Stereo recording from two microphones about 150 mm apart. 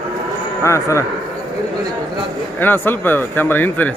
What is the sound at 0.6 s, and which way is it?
Speech, 20° left (ahead or behind).